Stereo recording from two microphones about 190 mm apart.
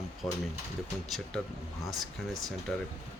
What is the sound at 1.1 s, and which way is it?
Speech, centre (ahead or behind).